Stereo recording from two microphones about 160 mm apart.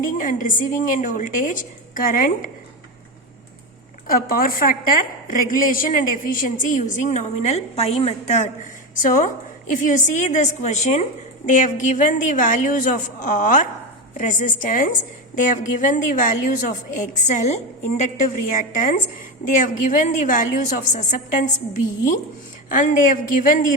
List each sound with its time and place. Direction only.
0.0 s a woman's voice: 55° left (ahead or behind)
4.0 s a woman's voice: 65° left (ahead or behind); by 8.4 s 45° left (ahead or behind)
9.0 s a woman's voice: 55° left (ahead or behind)